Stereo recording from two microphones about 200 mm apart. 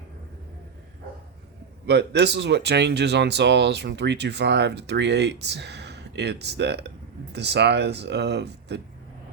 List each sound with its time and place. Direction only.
1.9 s speech: 55° right (ahead or behind)